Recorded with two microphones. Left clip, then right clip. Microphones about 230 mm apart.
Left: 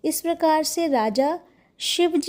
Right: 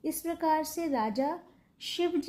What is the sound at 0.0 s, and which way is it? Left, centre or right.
A woman's voice, left.